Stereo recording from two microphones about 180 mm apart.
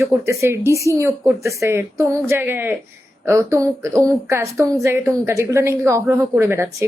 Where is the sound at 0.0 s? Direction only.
15° right (ahead or behind).